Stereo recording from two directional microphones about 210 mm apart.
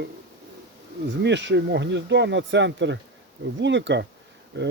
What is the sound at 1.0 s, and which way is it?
Speech, 55° right (ahead or behind).